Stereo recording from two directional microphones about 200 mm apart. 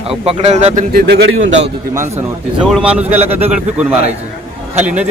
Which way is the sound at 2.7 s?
5° right (ahead or behind).